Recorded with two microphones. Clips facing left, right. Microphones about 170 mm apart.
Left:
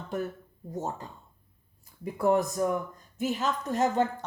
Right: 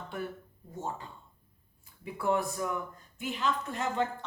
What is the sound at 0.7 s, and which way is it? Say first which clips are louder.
Speech: left 4 dB; 40° left (ahead or behind).